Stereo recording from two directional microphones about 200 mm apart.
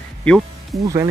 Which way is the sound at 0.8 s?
15° right (ahead or behind).